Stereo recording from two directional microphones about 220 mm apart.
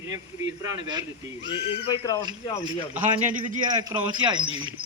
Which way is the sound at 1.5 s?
20° left (ahead or behind).